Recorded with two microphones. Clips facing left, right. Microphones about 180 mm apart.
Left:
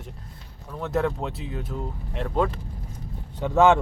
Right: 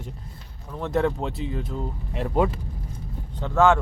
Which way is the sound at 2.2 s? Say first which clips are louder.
Right 2 dB; 10° right (ahead or behind).